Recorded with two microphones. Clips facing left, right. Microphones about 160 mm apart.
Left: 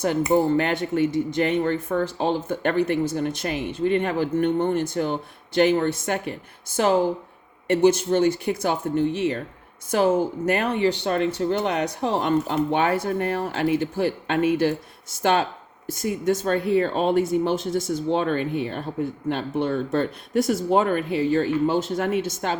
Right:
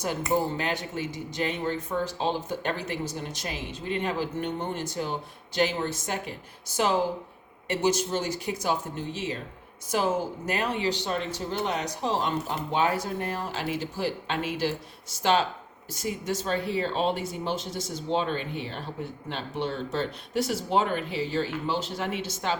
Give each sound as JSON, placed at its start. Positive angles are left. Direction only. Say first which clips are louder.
{"t": 0.0, "sound": "speech", "louder": "left 7 dB", "side_deg": 60}